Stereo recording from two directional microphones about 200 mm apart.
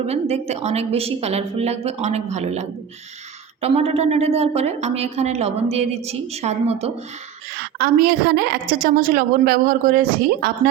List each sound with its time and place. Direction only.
0.1 s a woman's voice: 30° right (ahead or behind)
7.5 s a woman's voice: 50° right (ahead or behind)